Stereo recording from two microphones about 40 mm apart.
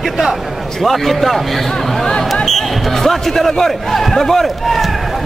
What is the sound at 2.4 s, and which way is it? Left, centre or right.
Speech, centre.